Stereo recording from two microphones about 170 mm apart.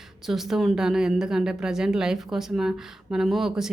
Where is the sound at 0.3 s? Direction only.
Centre (ahead or behind).